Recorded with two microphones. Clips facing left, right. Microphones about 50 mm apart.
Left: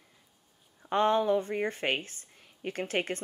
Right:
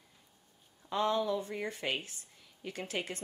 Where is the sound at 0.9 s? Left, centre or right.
Left.